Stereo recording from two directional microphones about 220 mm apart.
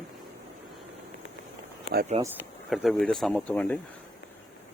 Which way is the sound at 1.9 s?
40° right (ahead or behind).